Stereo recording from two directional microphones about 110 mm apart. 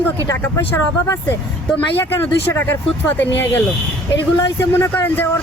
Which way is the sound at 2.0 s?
20° left (ahead or behind).